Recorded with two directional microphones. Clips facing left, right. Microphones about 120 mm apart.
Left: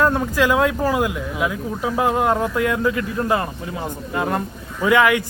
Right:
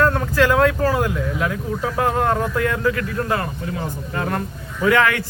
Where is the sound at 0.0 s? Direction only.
10° left (ahead or behind).